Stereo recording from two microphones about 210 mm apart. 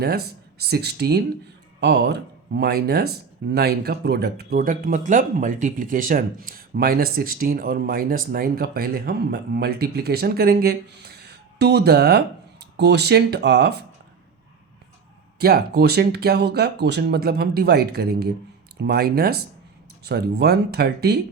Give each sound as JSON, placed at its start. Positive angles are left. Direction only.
{"t": 0.0, "sound": "speech", "side_deg": -50}
{"t": 15.4, "sound": "speech", "side_deg": -50}